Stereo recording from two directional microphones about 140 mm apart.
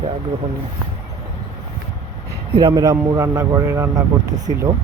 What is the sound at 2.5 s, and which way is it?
A man's voice, 30° right (ahead or behind).